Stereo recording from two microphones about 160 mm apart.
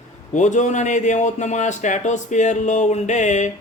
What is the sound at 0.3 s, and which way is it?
Speech, 50° left (ahead or behind).